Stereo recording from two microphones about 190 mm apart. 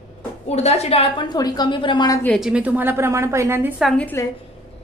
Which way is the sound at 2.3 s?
5° right (ahead or behind).